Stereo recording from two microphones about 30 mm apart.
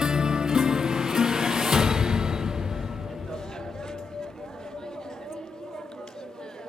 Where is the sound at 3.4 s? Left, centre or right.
Left.